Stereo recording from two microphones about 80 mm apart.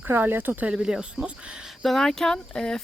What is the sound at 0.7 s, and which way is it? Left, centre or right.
Speech, centre.